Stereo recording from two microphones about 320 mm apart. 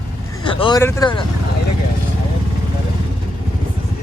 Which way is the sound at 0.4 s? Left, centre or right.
Centre.